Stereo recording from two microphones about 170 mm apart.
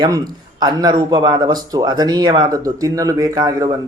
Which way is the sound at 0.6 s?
25° right (ahead or behind).